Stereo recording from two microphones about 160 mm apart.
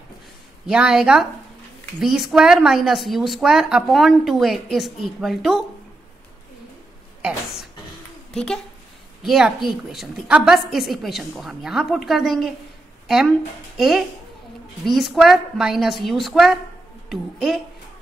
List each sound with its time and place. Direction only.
0.7 s a woman's voice: 5° right (ahead or behind)
8.3 s a woman's voice: 5° left (ahead or behind)
13.7 s a woman's voice: centre (ahead or behind)